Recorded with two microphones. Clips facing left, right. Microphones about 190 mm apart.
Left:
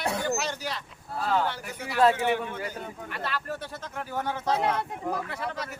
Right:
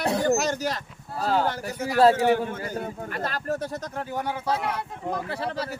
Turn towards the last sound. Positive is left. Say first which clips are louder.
# right 4 dB
turn(degrees=-30)  # may be behind; listen again after turning